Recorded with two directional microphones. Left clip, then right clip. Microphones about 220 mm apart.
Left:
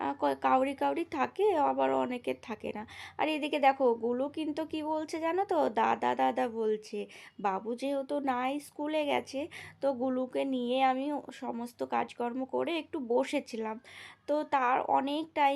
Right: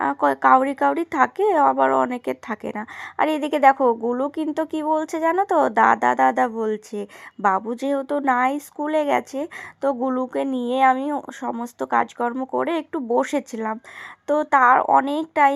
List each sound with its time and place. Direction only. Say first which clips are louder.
0.0 s speech: right 12 dB; 20° right (ahead or behind)